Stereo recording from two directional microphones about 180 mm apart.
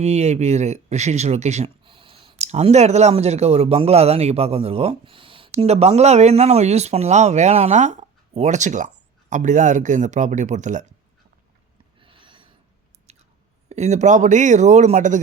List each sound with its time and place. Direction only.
0.0 s speech: 35° right (ahead or behind)
11.9 s a sound: 30° right (ahead or behind)
13.1 s chewing: 35° right (ahead or behind)
13.7 s speech: 40° right (ahead or behind)